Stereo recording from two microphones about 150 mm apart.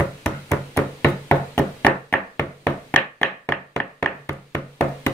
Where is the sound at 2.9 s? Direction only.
10° left (ahead or behind).